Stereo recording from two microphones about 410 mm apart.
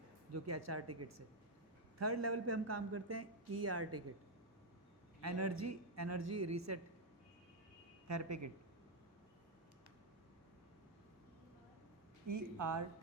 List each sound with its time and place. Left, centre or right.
0.4 s speech: right
5.2 s speech: right
8.0 s speech: right
12.3 s speech: right